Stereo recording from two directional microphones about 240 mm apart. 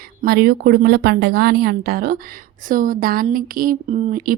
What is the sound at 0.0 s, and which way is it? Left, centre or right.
Speech, right.